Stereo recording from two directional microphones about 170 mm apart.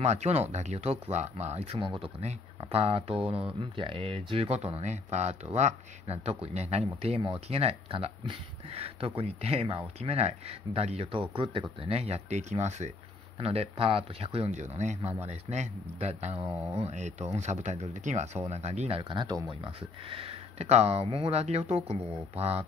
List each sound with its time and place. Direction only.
0.0 s speech: 40° right (ahead or behind)